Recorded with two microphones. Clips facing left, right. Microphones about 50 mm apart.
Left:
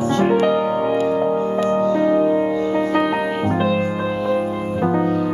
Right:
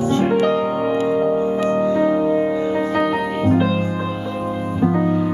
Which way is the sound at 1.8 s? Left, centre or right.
Centre.